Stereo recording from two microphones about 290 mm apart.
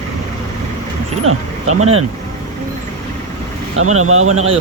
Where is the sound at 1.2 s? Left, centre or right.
Right.